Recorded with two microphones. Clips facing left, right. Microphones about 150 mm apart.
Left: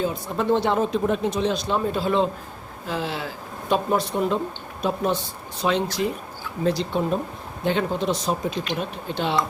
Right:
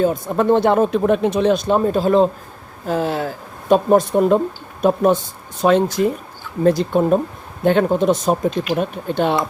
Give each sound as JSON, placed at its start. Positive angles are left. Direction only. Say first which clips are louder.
{"t": 0.0, "sound": "speech", "louder": "right 8 dB", "side_deg": -50}